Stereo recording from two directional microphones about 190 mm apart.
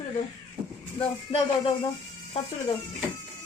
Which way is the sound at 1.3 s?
30° left (ahead or behind).